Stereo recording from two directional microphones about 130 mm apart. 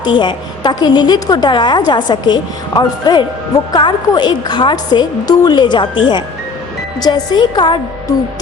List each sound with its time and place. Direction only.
0.0 s a woman's voice: 35° left (ahead or behind)